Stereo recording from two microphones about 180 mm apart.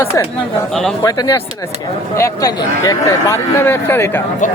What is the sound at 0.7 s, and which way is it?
Speech, centre (ahead or behind).